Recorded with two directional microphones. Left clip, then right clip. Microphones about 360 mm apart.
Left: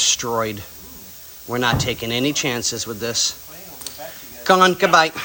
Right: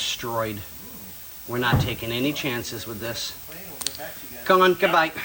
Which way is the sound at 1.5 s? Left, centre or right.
Centre.